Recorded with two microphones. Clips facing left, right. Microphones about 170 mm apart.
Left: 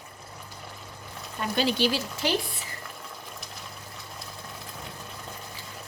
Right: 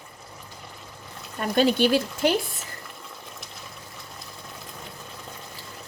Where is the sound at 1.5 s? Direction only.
50° right (ahead or behind).